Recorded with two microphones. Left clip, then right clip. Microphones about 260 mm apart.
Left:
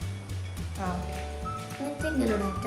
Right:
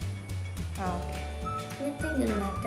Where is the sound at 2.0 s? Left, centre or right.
Centre.